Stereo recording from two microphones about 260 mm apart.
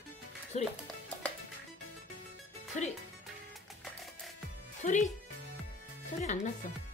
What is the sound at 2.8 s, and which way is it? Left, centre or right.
Speech, left.